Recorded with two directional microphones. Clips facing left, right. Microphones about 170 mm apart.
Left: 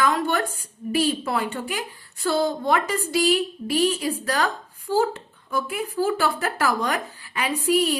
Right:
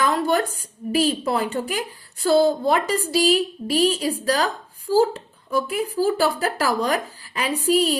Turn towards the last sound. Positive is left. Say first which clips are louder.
# right 2 dB
turn(degrees=-35)  # may be behind; listen again after turning